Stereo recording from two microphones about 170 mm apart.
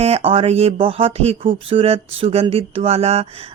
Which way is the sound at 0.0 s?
35° right (ahead or behind).